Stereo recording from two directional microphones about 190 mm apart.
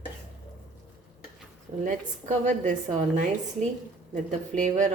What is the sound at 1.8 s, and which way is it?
A woman's voice, 40° right (ahead or behind).